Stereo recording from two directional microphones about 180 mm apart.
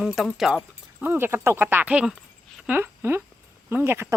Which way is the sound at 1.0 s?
10° right (ahead or behind).